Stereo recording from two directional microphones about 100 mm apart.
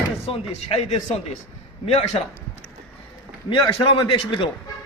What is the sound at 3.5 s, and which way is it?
A man's voice, 55° left (ahead or behind).